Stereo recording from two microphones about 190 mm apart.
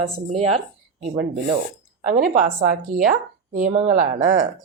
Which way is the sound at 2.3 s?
45° right (ahead or behind).